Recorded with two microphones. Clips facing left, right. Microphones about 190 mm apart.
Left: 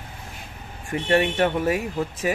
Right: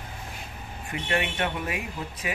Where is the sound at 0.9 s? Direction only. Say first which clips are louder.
Left 8 dB; 40° left (ahead or behind).